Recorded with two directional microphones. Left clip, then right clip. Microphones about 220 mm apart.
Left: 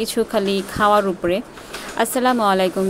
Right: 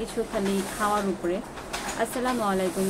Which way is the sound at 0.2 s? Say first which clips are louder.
Left 8 dB; 55° left (ahead or behind).